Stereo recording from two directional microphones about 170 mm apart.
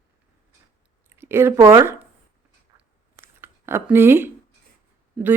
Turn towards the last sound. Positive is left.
turn(degrees=-5)  # may be behind; listen again after turning